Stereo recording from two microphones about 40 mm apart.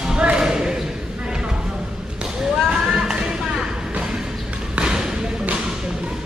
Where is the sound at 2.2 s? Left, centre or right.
Centre.